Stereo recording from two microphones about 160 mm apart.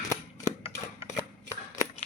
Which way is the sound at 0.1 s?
20° left (ahead or behind).